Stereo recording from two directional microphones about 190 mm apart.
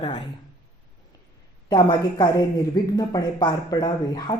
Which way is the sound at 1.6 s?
25° left (ahead or behind).